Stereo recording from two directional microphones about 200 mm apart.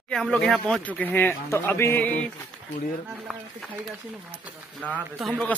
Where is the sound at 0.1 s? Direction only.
5° left (ahead or behind).